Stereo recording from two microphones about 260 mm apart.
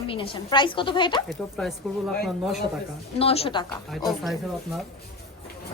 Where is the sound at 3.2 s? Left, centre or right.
Left.